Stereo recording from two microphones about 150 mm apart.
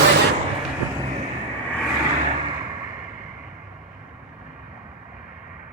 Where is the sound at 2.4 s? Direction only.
30° right (ahead or behind).